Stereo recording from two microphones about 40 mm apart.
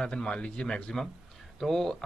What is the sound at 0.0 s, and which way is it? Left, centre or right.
Speech, centre.